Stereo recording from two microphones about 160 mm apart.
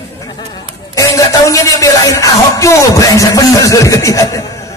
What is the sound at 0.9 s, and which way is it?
Music, 20° left (ahead or behind).